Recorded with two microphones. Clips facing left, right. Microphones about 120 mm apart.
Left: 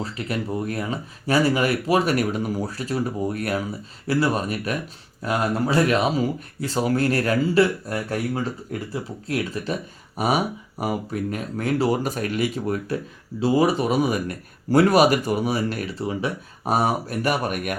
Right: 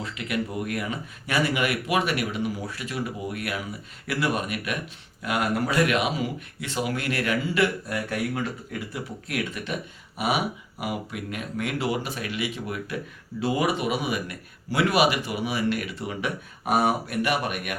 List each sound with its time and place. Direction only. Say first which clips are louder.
0.0 s speech: left 2 dB; 35° left (ahead or behind)